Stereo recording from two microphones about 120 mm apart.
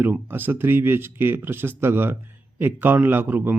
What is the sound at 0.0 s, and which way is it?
Speech, 15° right (ahead or behind).